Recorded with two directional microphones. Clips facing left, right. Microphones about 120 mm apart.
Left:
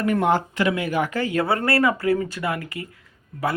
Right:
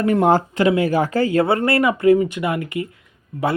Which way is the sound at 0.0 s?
30° right (ahead or behind).